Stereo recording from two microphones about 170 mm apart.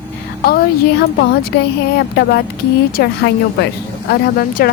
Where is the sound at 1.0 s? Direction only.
65° left (ahead or behind).